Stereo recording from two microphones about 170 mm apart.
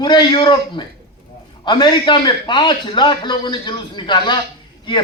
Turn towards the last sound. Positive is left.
turn(degrees=25)  # may be behind; listen again after turning